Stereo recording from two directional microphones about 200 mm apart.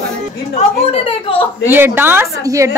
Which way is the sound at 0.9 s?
25° left (ahead or behind).